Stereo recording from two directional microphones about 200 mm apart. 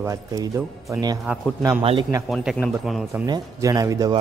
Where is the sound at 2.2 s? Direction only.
Centre (ahead or behind).